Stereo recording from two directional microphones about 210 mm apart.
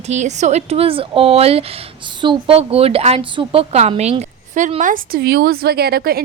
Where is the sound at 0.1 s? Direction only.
35° right (ahead or behind).